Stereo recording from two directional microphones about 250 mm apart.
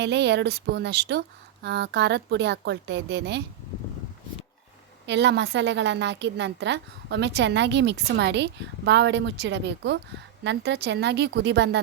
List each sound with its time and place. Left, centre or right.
0.0 s a woman's voice: right
5.0 s a woman's voice: right